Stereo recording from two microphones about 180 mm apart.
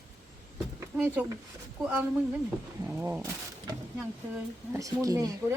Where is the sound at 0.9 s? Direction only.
10° right (ahead or behind).